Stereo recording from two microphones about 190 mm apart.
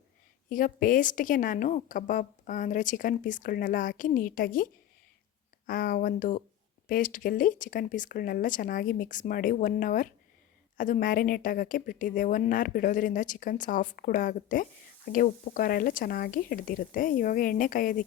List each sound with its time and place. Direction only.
0.5 s a woman's voice: 45° left (ahead or behind)